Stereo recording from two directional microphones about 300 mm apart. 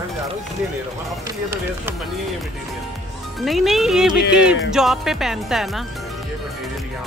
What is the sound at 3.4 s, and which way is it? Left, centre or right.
Music, centre.